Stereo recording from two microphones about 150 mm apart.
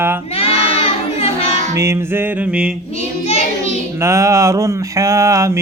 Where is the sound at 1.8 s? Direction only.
20° right (ahead or behind).